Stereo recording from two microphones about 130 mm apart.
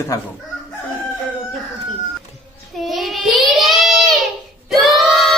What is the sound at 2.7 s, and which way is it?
Child singing, centre (ahead or behind).